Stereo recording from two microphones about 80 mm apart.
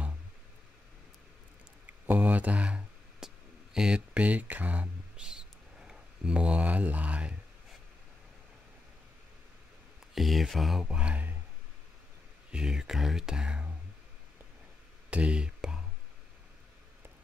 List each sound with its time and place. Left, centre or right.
1.9 s a sound: right
3.7 s speech: centre
5.2 s speech: centre
10.1 s speech: centre
12.4 s speech: centre
15.0 s a sound: centre